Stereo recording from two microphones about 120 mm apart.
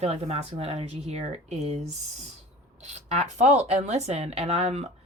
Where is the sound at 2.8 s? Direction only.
75° right (ahead or behind).